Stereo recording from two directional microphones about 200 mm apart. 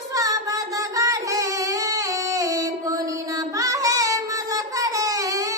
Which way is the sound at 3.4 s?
15° right (ahead or behind).